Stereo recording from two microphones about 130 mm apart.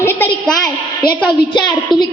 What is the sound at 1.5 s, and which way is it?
Speech, 35° left (ahead or behind).